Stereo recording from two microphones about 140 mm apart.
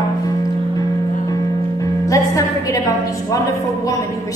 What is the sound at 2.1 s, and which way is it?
Speech, 25° left (ahead or behind).